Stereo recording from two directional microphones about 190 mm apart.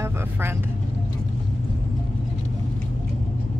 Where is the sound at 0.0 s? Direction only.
15° right (ahead or behind).